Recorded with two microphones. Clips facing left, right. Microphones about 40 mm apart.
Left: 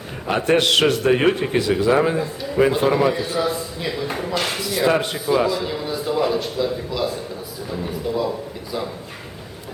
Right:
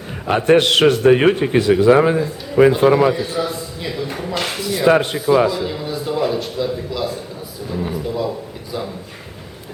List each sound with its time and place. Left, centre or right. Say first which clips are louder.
0.3 s a man's voice: right 4 dB; centre
3.2 s a man's voice: even; centre
4.9 s a man's voice: right 7 dB; centre
5.5 s a man's voice: right 1 dB; centre